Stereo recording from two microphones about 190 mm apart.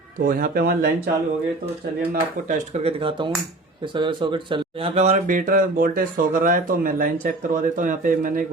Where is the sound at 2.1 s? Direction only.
40° right (ahead or behind).